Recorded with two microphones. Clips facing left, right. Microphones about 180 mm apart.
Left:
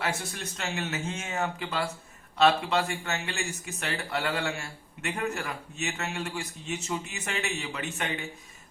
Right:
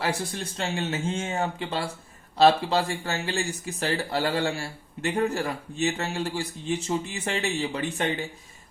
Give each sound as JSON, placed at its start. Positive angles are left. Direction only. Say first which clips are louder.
{"t": 0.0, "sound": "speech", "louder": "right 4 dB", "side_deg": -35}